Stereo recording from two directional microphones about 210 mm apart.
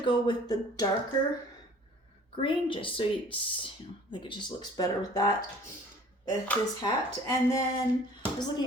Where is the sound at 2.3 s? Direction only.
25° left (ahead or behind).